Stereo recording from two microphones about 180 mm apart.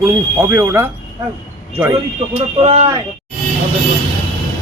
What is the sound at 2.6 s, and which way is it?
Speech, 35° right (ahead or behind).